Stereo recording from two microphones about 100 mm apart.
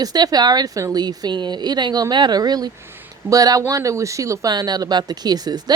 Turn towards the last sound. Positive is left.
turn(degrees=-40)  # may be behind; listen again after turning